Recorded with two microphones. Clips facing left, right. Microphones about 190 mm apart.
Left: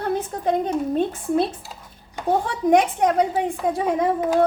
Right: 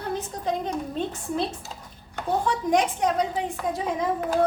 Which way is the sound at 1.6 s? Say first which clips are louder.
Even; 10° left (ahead or behind).